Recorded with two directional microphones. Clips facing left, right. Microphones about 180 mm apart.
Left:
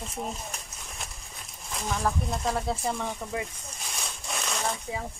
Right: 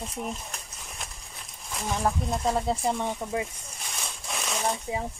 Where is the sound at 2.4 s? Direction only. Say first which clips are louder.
Right 4 dB; 15° right (ahead or behind).